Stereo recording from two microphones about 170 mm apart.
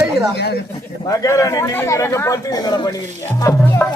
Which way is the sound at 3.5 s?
20° left (ahead or behind).